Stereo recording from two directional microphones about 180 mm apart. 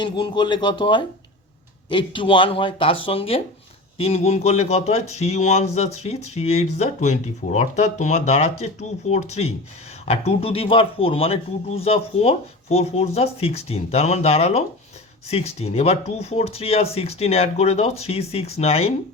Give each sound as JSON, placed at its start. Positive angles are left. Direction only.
{"t": 0.0, "sound": "speech", "side_deg": 25}